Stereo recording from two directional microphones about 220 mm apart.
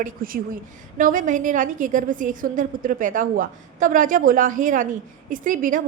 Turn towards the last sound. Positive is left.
turn(degrees=-35)  # may be behind; listen again after turning